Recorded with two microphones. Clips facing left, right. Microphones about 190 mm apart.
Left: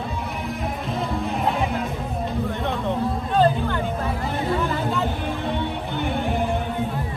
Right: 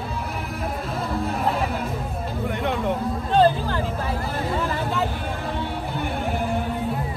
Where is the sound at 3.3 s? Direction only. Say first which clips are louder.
Right 2 dB; 30° right (ahead or behind).